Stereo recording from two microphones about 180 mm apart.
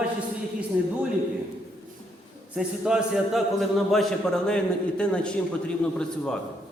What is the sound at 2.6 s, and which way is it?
A man's voice, 5° right (ahead or behind).